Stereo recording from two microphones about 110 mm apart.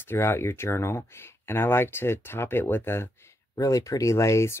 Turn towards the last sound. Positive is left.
turn(degrees=25)  # may be behind; listen again after turning